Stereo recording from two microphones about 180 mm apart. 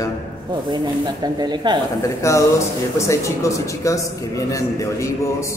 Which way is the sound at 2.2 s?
15° left (ahead or behind).